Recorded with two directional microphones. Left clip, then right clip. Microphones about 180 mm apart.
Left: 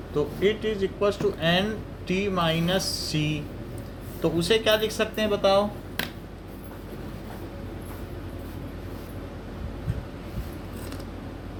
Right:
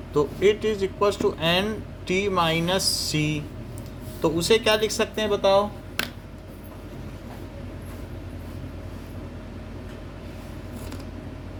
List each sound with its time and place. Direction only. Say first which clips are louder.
0.1 s a man's voice: right 4 dB; 45° right (ahead or behind)
5.1 s speech: right 1 dB; 25° right (ahead or behind)